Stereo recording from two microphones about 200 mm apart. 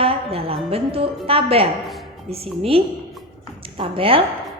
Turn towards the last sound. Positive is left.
turn(degrees=-25)  # may be behind; listen again after turning